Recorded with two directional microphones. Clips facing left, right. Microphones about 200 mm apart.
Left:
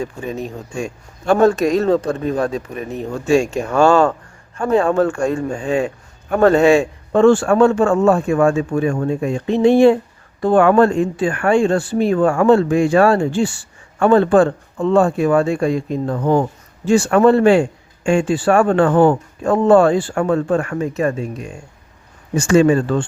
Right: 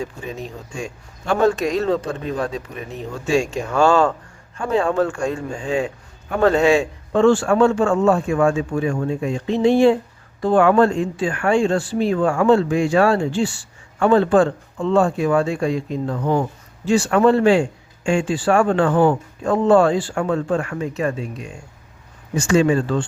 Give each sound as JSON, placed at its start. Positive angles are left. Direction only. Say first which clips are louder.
{"t": 0.0, "sound": "speech", "louder": "left 4 dB", "side_deg": 50}